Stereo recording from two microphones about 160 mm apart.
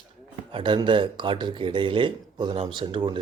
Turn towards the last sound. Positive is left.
turn(degrees=-30)  # may be behind; listen again after turning